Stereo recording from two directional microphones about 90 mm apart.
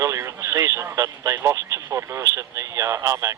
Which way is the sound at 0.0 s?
35° right (ahead or behind).